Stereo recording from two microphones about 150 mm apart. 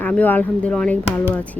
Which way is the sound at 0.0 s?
10° left (ahead or behind).